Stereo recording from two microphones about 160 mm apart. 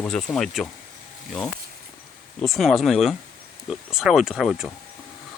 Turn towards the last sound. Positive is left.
turn(degrees=0)  # may be behind; listen again after turning